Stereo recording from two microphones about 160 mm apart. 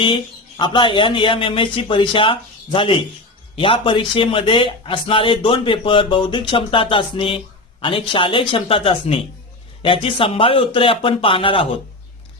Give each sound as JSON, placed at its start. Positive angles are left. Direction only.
{"t": 0.0, "sound": "a man's voice", "side_deg": 30}